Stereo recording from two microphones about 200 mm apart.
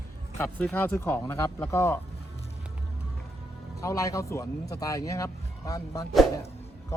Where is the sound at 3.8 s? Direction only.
15° left (ahead or behind).